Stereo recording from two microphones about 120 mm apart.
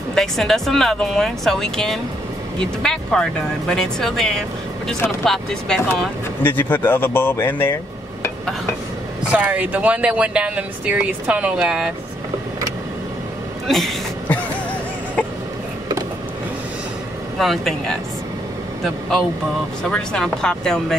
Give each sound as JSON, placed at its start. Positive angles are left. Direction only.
{"t": 0.1, "sound": "speech", "side_deg": 5}
{"t": 6.4, "sound": "speech", "side_deg": 15}
{"t": 9.3, "sound": "speech", "side_deg": -15}
{"t": 13.7, "sound": "speech", "side_deg": 0}
{"t": 17.4, "sound": "speech", "side_deg": 0}
{"t": 19.8, "sound": "speech", "side_deg": 5}